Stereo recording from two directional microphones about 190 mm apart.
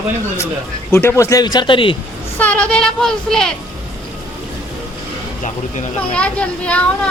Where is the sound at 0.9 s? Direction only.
10° left (ahead or behind).